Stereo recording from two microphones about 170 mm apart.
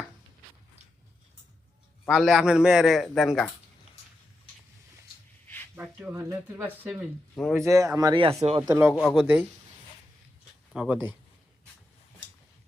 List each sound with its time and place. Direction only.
2.0 s a man's voice: centre (ahead or behind)
5.7 s speech: 5° right (ahead or behind)
6.1 s speech: 15° right (ahead or behind)
7.3 s a man's voice: centre (ahead or behind)
7.6 s speech: 20° right (ahead or behind)
8.6 s a man's voice: 10° right (ahead or behind)
10.7 s speech: 5° right (ahead or behind)